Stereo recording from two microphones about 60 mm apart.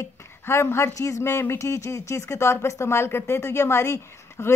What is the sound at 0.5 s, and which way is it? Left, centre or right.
Speech, left.